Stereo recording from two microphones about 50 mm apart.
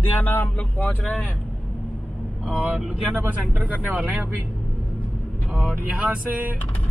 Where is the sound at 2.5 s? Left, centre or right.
Right.